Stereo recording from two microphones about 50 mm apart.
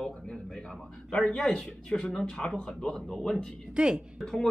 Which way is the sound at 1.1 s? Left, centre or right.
Centre.